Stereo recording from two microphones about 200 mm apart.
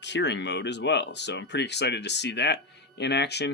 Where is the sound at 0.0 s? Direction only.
60° left (ahead or behind).